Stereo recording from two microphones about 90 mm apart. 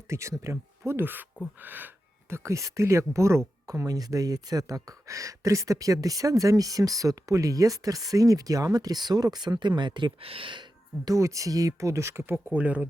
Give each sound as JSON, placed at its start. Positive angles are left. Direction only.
{"t": 0.1, "sound": "speech", "side_deg": -35}
{"t": 2.3, "sound": "speech", "side_deg": -35}
{"t": 11.0, "sound": "speech", "side_deg": -35}